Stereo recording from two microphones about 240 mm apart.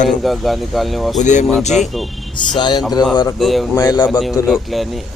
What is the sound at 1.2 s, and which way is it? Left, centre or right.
Speech, left.